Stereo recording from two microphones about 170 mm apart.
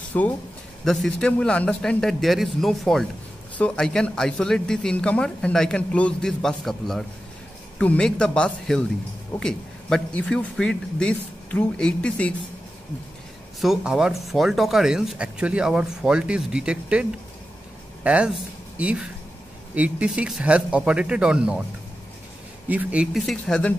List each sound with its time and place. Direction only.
0.1 s speech: 10° left (ahead or behind)
13.6 s speech: centre (ahead or behind)
22.7 s speech: 10° right (ahead or behind)
23.1 s speech: 5° left (ahead or behind)